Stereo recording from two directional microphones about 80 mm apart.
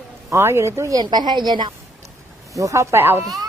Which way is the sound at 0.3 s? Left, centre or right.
Right.